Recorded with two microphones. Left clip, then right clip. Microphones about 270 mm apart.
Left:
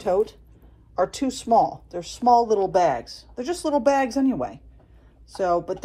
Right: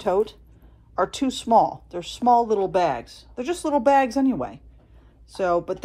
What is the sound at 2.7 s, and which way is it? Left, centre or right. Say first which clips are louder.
Speech: left 3 dB; centre.